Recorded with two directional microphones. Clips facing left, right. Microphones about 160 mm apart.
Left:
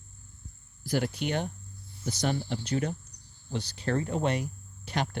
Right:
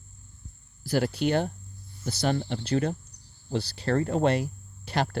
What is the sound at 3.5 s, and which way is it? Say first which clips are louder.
Speech: right 4 dB; 35° right (ahead or behind).